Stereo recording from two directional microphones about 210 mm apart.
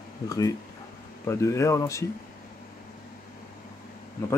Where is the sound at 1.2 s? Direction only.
15° left (ahead or behind).